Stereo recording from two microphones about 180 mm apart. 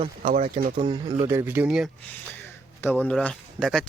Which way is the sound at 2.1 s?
10° left (ahead or behind).